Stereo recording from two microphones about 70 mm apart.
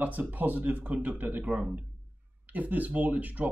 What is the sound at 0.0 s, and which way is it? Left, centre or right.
Speech, right.